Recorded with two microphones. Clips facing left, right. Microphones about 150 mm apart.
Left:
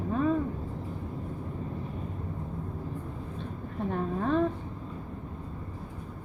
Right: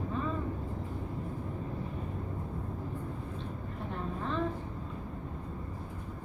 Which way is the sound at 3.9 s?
55° left (ahead or behind).